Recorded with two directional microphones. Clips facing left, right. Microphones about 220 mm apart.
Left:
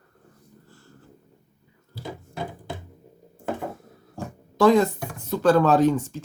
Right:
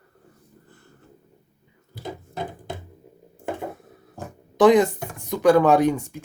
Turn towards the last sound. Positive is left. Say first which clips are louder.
# right 1 dB
turn(degrees=-15)  # may be behind; listen again after turning